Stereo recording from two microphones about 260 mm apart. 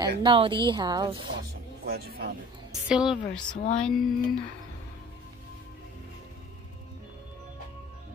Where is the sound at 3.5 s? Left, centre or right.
Left.